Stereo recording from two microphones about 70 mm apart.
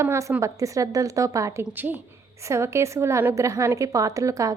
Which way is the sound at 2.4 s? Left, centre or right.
Right.